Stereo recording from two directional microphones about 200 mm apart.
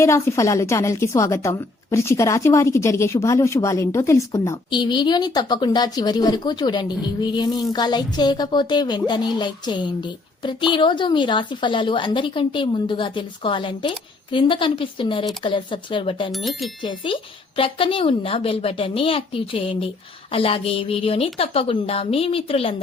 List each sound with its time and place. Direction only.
0.0 s a woman's voice: 15° left (ahead or behind)
16.3 s speech: centre (ahead or behind)
16.8 s a woman's voice: 25° left (ahead or behind)